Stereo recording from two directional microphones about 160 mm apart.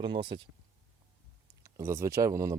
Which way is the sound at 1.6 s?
15° right (ahead or behind).